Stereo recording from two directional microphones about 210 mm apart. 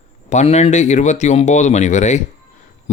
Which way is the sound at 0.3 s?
35° left (ahead or behind).